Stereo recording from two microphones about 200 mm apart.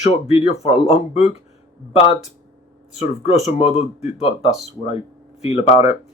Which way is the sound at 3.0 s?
35° left (ahead or behind).